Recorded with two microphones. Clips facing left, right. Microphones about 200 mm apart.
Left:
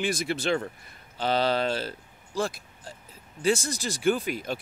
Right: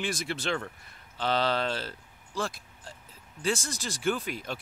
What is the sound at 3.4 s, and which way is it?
A man's voice, 15° left (ahead or behind).